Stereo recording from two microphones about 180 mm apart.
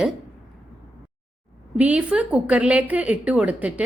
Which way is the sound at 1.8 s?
10° right (ahead or behind).